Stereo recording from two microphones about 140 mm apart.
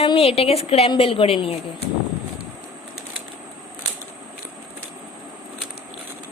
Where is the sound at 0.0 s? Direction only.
40° left (ahead or behind).